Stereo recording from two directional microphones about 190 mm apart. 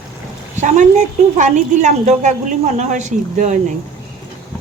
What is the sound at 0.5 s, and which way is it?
A woman's voice, 40° right (ahead or behind).